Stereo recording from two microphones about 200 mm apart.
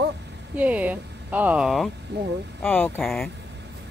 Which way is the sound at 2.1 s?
55° right (ahead or behind).